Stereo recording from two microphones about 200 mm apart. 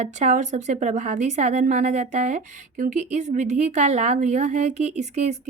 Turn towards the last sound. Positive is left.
turn(degrees=-35)  # may be behind; listen again after turning